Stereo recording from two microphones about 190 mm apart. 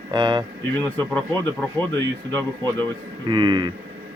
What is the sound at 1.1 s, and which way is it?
Speech, 10° left (ahead or behind).